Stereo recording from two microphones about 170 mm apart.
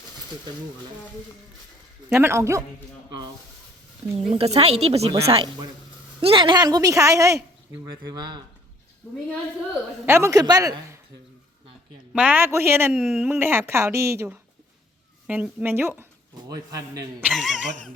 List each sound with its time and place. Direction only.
2.1 s a woman's voice: 15° right (ahead or behind)
4.1 s a woman's voice: 35° right (ahead or behind)
10.1 s a woman's voice: 15° right (ahead or behind)
12.1 s a woman's voice: 10° right (ahead or behind)
17.2 s speech: 5° right (ahead or behind)